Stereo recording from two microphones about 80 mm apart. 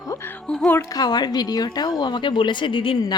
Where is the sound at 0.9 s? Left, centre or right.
Left.